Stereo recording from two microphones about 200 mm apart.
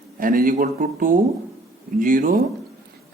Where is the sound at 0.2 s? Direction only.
45° right (ahead or behind).